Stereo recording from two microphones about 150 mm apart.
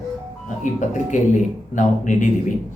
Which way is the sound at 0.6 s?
55° left (ahead or behind).